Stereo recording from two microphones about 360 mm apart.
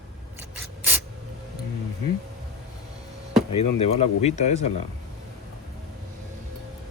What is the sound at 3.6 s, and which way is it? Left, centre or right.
Speech, centre.